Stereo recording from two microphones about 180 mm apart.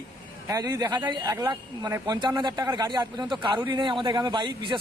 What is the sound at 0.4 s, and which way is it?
Speech, 20° right (ahead or behind).